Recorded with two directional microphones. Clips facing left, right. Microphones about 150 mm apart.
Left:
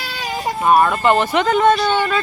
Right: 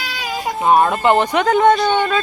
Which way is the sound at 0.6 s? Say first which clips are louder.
Even; 20° right (ahead or behind).